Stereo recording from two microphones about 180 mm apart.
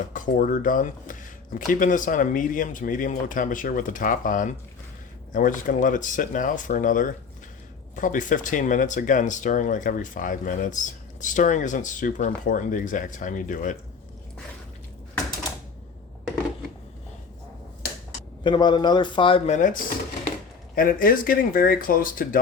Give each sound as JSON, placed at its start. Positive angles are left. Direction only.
{"t": 0.0, "sound": "speech", "side_deg": 45}
{"t": 18.4, "sound": "speech", "side_deg": 25}
{"t": 19.5, "sound": "speech", "side_deg": 45}
{"t": 20.7, "sound": "speech", "side_deg": 50}